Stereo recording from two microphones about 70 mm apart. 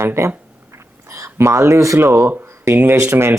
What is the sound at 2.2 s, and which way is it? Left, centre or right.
Speech, right.